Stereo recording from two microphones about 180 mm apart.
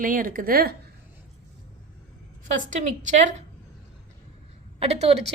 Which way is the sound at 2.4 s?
45° right (ahead or behind).